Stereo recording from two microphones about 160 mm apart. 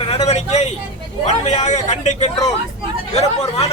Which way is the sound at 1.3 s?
45° left (ahead or behind).